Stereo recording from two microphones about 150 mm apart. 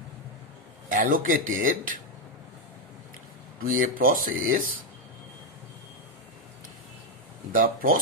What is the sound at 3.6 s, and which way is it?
Speech, 70° right (ahead or behind).